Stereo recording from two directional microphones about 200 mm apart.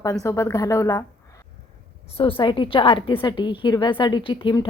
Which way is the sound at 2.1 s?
25° left (ahead or behind).